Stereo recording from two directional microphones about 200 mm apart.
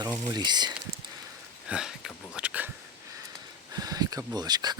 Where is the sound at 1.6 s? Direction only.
5° right (ahead or behind).